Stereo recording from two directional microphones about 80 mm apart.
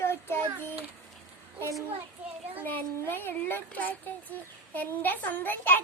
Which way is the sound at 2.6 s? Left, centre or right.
Left.